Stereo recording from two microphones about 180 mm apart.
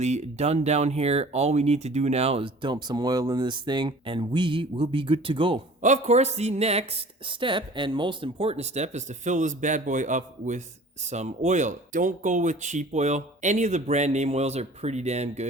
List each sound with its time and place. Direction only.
0.0 s speech: 40° right (ahead or behind)
5.8 s speech: 40° right (ahead or behind)